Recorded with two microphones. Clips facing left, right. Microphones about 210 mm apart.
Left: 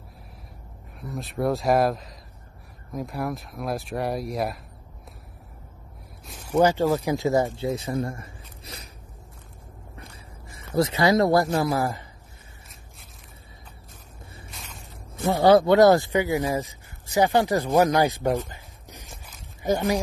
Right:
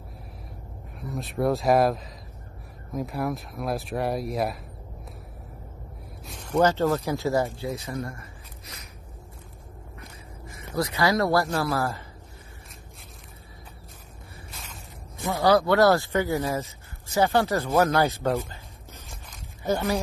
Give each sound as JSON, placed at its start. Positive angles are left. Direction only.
{"t": 0.9, "sound": "speech", "side_deg": 0}
{"t": 6.2, "sound": "speech", "side_deg": 5}
{"t": 10.7, "sound": "speech", "side_deg": 25}
{"t": 14.5, "sound": "a sound", "side_deg": 0}
{"t": 15.3, "sound": "speech", "side_deg": 25}
{"t": 18.5, "sound": "a sound", "side_deg": 15}